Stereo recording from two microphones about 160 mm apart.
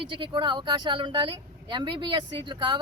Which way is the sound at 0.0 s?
30° right (ahead or behind).